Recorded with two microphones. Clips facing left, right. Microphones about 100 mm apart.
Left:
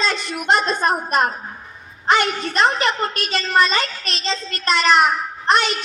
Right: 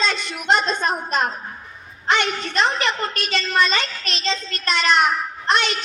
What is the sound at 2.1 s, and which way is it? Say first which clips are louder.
Speech: left 3 dB; 45° left (ahead or behind).